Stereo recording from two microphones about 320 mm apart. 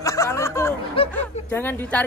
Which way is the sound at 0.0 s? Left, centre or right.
Centre.